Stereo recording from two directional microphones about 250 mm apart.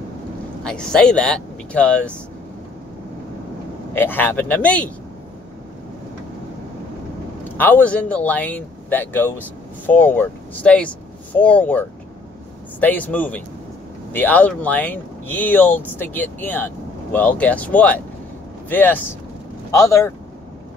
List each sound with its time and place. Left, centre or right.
0.7 s speech: centre
3.9 s speech: centre
7.5 s speech: centre
12.8 s speech: centre